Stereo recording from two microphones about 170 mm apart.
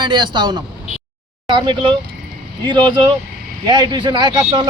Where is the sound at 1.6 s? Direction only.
25° right (ahead or behind).